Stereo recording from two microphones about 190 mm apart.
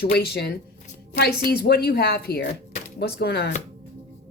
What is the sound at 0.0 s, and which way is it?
Speech, 55° left (ahead or behind).